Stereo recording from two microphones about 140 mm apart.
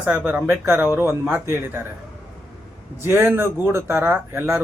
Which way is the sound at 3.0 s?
15° right (ahead or behind).